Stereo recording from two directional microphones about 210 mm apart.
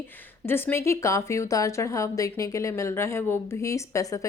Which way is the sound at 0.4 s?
10° left (ahead or behind).